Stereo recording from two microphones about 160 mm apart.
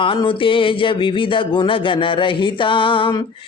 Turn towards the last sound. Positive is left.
turn(degrees=30)  # may be behind; listen again after turning